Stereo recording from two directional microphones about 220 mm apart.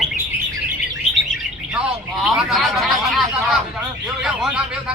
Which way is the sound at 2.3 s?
Centre (ahead or behind).